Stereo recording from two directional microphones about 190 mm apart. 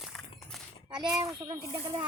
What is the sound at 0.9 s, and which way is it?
Speech, 5° right (ahead or behind).